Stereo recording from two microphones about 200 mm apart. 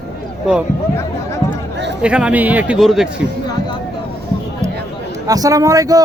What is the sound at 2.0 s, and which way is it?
Speech, 5° right (ahead or behind).